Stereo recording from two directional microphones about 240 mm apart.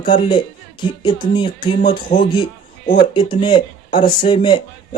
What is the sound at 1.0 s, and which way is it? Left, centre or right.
Speech, centre.